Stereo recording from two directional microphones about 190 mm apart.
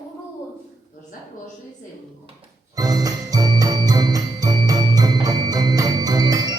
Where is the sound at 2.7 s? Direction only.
20° right (ahead or behind).